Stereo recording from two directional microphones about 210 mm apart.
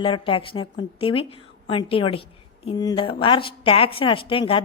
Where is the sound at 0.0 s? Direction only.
25° left (ahead or behind).